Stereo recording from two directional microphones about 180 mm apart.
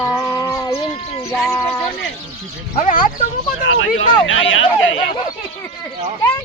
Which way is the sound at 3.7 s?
90° left.